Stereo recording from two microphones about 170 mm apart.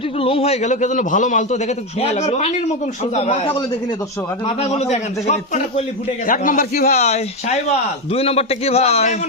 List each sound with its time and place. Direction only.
0.2 s a man's voice: 35° left (ahead or behind)
6.2 s a man's voice: 55° left (ahead or behind)
6.9 s a man's voice: 40° left (ahead or behind)